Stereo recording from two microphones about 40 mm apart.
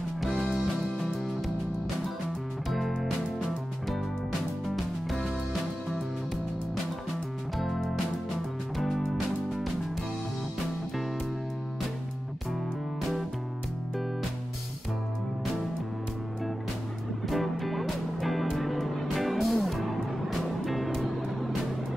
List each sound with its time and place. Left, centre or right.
3.0 s music: centre
7.5 s music: centre
17.3 s music: centre